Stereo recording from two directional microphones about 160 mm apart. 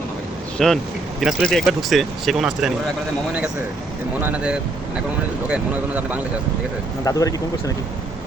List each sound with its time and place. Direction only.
0.6 s speech: centre (ahead or behind)
4.2 s speech: 10° right (ahead or behind)
7.0 s speech: 20° left (ahead or behind)